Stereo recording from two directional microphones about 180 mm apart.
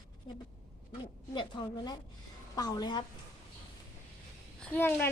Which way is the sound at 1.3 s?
25° left (ahead or behind).